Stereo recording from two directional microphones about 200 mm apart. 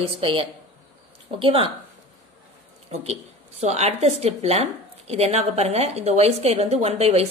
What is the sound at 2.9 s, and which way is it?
Speech, 30° right (ahead or behind).